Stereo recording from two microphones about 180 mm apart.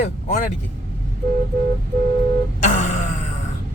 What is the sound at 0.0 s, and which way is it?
Speech, 45° left (ahead or behind).